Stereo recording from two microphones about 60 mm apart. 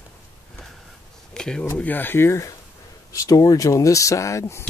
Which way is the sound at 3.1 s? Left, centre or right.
Left.